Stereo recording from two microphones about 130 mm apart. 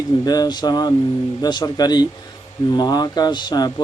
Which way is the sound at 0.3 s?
30° left (ahead or behind).